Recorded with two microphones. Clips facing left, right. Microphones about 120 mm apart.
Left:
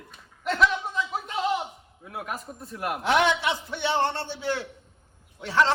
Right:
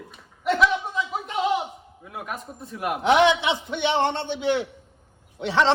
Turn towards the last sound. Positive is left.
turn(degrees=-25)  # may be behind; listen again after turning